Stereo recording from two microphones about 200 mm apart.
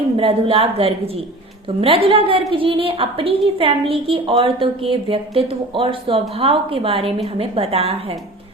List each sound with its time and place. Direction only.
0.2 s a woman's voice: 25° right (ahead or behind)